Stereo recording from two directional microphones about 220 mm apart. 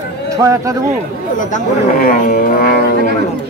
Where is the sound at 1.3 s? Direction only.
40° left (ahead or behind).